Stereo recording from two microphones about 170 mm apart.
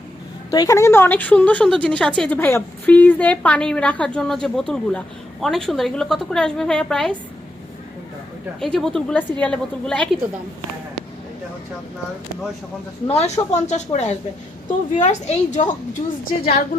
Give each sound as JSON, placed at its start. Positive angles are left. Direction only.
{"t": 0.5, "sound": "a woman's voice", "side_deg": 20}
{"t": 8.6, "sound": "a woman's voice", "side_deg": 0}
{"t": 13.1, "sound": "a woman's voice", "side_deg": 40}
{"t": 16.2, "sound": "a woman's voice", "side_deg": 65}